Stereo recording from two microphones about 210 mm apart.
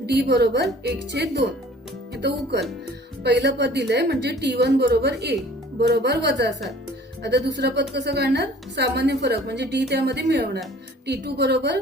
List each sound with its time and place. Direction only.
0.0 s a woman's voice: 50° right (ahead or behind)
3.4 s a woman's voice: 55° right (ahead or behind)